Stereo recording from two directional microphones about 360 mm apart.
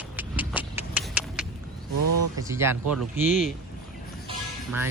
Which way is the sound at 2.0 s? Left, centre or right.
Right.